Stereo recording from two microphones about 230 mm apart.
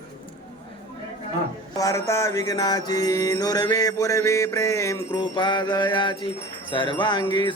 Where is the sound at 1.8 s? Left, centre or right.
Centre.